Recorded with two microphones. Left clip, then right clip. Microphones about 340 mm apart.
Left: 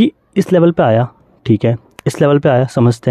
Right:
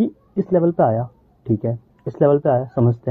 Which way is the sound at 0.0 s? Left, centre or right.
Left.